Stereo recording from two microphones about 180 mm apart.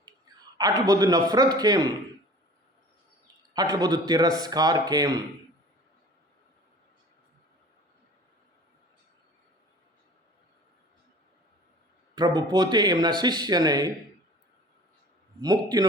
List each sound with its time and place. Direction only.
0.3 s a sound: 20° right (ahead or behind)
0.6 s speech: 20° right (ahead or behind)
3.5 s speech: 20° right (ahead or behind)
12.1 s speech: 25° right (ahead or behind)
15.4 s speech: 20° right (ahead or behind)